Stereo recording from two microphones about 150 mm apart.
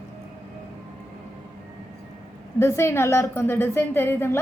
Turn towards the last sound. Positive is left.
turn(degrees=15)  # may be behind; listen again after turning